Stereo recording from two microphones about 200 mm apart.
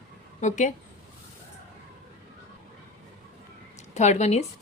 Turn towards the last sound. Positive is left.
turn(degrees=35)  # may be behind; listen again after turning